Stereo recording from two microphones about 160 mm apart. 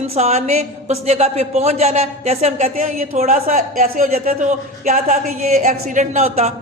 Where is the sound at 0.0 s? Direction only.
40° right (ahead or behind).